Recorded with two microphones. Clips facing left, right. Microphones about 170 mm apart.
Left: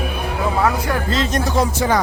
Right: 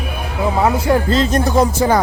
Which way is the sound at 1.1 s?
35° right (ahead or behind).